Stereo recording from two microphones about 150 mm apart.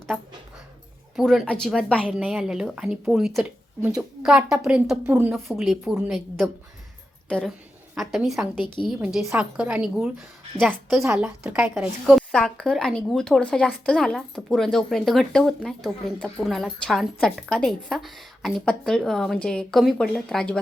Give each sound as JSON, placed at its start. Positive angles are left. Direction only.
{"t": 1.1, "sound": "speech", "side_deg": 0}
{"t": 2.0, "sound": "speech", "side_deg": -10}
{"t": 5.5, "sound": "a woman's voice", "side_deg": 0}
{"t": 8.6, "sound": "a woman's voice", "side_deg": 30}
{"t": 8.9, "sound": "a woman's voice", "side_deg": 0}
{"t": 11.7, "sound": "speech", "side_deg": 0}